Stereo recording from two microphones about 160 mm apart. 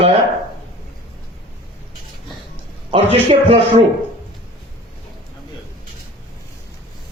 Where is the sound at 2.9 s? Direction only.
35° right (ahead or behind).